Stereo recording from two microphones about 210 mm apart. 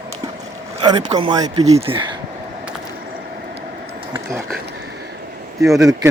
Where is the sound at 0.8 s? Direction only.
20° right (ahead or behind).